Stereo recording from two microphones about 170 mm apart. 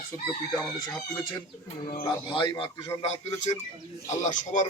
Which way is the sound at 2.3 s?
30° left (ahead or behind).